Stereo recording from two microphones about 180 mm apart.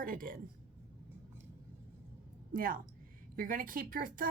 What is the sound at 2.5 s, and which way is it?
Speech, 50° right (ahead or behind).